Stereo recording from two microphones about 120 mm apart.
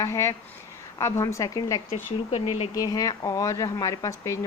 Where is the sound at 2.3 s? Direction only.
55° left (ahead or behind).